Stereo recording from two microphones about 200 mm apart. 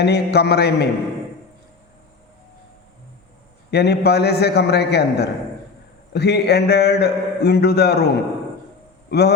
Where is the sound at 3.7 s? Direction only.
55° left (ahead or behind).